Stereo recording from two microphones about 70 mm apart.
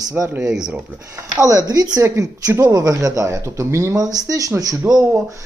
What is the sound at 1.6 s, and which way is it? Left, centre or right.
Speech, right.